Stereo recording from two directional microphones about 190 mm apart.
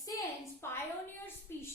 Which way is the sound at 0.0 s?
15° left (ahead or behind).